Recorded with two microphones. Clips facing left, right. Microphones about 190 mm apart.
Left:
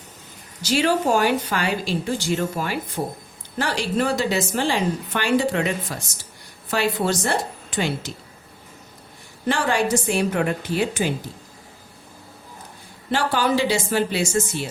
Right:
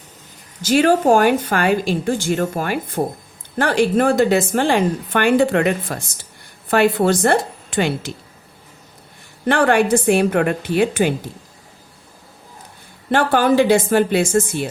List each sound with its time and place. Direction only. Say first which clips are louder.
0.6 s a woman's voice: right 6 dB; 50° right (ahead or behind)
9.5 s a woman's voice: right 6 dB; 60° right (ahead or behind)
13.1 s a woman's voice: right 6 dB; 55° right (ahead or behind)